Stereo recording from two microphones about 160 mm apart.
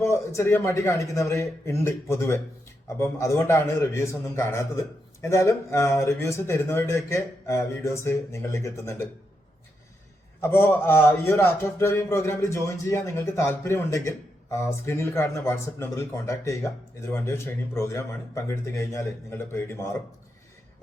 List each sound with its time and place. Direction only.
0.0 s speech: 15° left (ahead or behind)
10.4 s speech: 15° left (ahead or behind)